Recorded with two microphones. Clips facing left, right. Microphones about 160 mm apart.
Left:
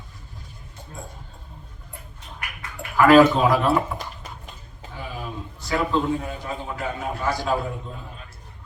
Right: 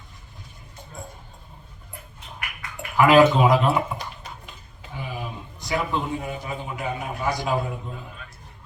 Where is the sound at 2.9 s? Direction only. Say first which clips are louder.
Left 1 dB; 15° right (ahead or behind).